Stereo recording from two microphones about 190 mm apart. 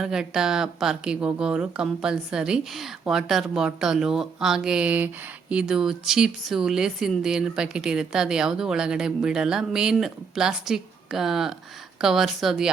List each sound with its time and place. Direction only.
0.0 s speech: 5° right (ahead or behind)